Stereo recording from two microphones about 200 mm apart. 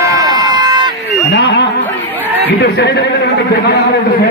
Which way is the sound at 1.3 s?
60° left (ahead or behind).